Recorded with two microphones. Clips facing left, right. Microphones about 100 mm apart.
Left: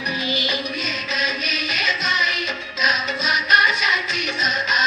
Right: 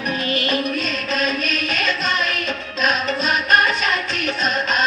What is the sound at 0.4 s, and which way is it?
Music, 45° right (ahead or behind).